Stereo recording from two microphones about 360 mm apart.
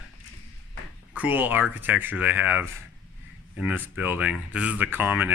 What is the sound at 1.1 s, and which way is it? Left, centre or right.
Speech, centre.